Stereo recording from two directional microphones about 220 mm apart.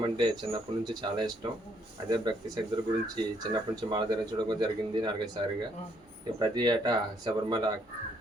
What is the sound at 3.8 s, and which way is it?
Speech, 20° right (ahead or behind).